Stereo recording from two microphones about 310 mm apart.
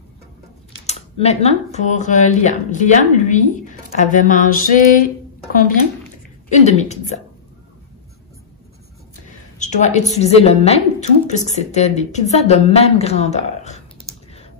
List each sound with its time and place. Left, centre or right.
0.8 s speech: left
9.6 s a woman's voice: left